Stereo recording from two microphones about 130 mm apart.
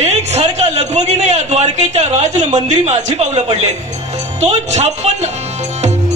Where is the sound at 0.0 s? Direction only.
55° right (ahead or behind).